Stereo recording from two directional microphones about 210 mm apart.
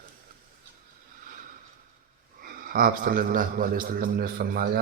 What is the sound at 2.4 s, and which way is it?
A man's voice, 45° right (ahead or behind).